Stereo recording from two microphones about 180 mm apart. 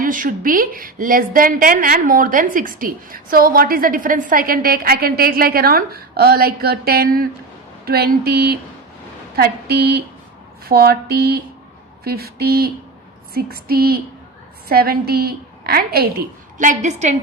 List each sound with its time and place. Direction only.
0.0 s a woman's voice: 50° right (ahead or behind)